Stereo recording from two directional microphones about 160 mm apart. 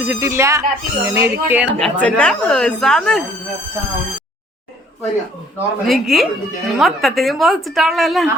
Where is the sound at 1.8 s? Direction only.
5° left (ahead or behind).